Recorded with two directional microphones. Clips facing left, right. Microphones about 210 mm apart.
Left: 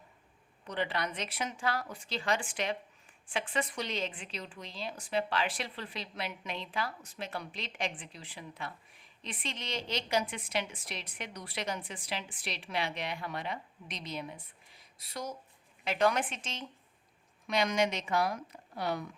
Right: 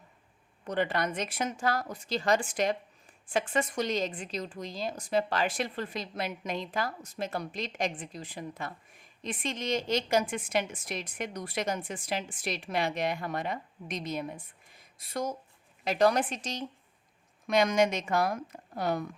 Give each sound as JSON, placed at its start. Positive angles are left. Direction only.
{"t": 0.6, "sound": "a woman's voice", "side_deg": -50}
{"t": 15.8, "sound": "a woman's voice", "side_deg": -40}